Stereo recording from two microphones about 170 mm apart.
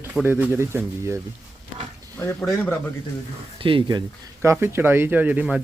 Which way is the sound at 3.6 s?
30° right (ahead or behind).